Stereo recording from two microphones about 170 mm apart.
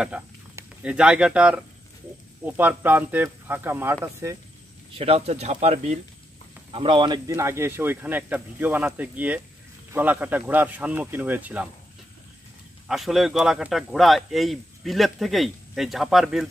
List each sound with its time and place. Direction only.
0.1 s a man's voice: 5° right (ahead or behind)
4.9 s speech: 35° right (ahead or behind)
6.7 s a man's voice: 30° right (ahead or behind); by 11.7 s 10° right (ahead or behind)
12.8 s speech: centre (ahead or behind)